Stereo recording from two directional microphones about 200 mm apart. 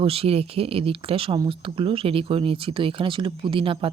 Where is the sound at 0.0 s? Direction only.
30° right (ahead or behind).